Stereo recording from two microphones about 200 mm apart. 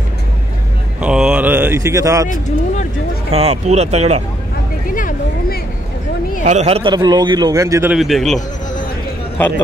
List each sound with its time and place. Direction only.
1.0 s a sound: 5° right (ahead or behind)
2.2 s speech: 40° left (ahead or behind)
3.3 s speech: 30° right (ahead or behind)
4.8 s a sound: 40° left (ahead or behind)
6.4 s a man's voice: 35° right (ahead or behind); by 7.9 s 15° right (ahead or behind)
7.9 s a man's voice: centre (ahead or behind)